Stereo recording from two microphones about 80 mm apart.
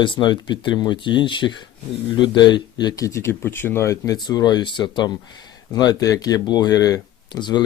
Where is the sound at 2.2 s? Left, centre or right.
Left.